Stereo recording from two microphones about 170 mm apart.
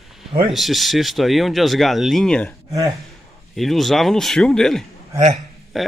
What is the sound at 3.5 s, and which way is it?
Speech, centre (ahead or behind).